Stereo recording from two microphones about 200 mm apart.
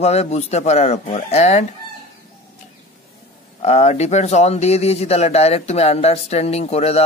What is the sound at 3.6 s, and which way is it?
Speech, 35° left (ahead or behind).